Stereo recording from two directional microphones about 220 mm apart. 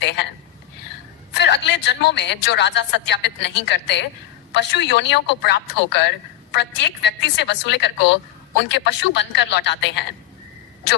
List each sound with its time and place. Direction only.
1.3 s a woman's voice: 50° left (ahead or behind)